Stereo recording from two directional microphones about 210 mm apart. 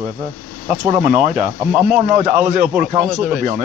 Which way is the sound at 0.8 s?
40° right (ahead or behind).